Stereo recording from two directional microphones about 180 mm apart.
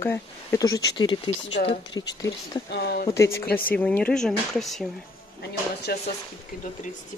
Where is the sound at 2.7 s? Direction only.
65° left (ahead or behind).